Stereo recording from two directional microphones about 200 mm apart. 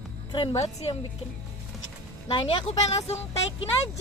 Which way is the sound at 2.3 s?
30° left (ahead or behind).